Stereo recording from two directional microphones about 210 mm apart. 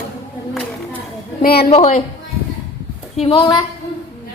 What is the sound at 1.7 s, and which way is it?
Speech, 30° left (ahead or behind).